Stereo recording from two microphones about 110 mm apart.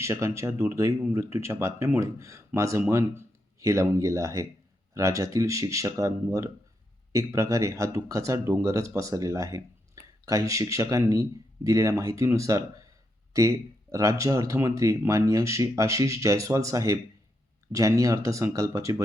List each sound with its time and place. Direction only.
0.0 s speech: 25° right (ahead or behind)